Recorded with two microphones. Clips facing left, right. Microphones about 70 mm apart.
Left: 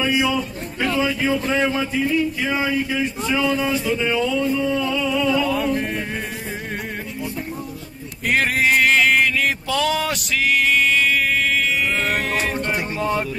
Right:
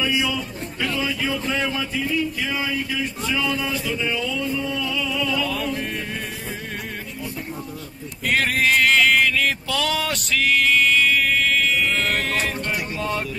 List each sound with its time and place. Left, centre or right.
0.0 s a man's voice: left
8.3 s a sound: centre
12.5 s speech: left